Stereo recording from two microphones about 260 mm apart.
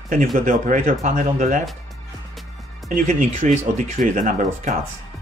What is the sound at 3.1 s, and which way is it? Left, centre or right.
Speech, right.